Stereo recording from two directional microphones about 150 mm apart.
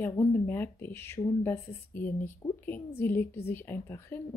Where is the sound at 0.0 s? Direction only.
15° left (ahead or behind).